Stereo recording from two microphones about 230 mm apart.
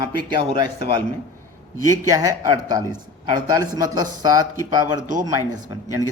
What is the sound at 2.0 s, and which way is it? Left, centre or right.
A man's voice, centre.